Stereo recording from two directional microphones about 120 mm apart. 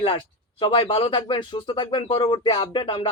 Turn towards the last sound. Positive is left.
turn(degrees=45)  # may be behind; listen again after turning